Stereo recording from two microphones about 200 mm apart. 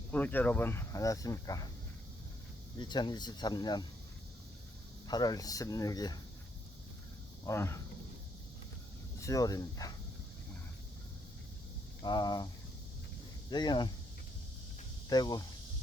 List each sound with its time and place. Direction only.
0.1 s speech: 10° left (ahead or behind)
2.9 s speech: 20° left (ahead or behind)
5.0 s speech: 20° left (ahead or behind)
7.4 s speech: 15° left (ahead or behind)
9.2 s speech: 15° left (ahead or behind)
12.0 s speech: 20° left (ahead or behind)
13.5 s speech: 20° left (ahead or behind)
15.1 s speech: 20° left (ahead or behind)